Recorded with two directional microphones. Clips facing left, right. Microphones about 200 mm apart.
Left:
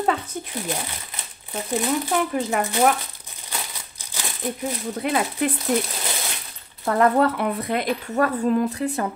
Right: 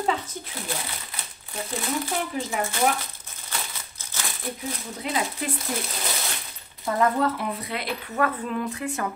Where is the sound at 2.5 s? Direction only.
60° left (ahead or behind).